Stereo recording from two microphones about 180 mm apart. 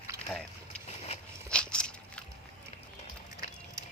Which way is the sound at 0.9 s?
35° left (ahead or behind).